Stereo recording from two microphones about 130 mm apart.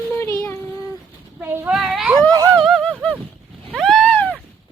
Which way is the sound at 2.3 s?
30° right (ahead or behind).